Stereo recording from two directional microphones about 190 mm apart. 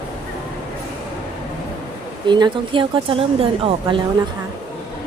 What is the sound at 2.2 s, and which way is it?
Speech, 25° right (ahead or behind).